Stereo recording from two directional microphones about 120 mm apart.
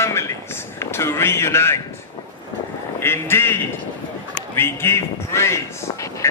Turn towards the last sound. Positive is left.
turn(degrees=20)  # may be behind; listen again after turning